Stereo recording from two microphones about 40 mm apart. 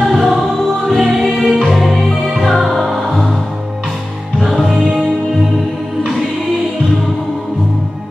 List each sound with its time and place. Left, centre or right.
0.0 s music: centre
1.8 s music: centre
4.4 s music: centre
4.7 s music: right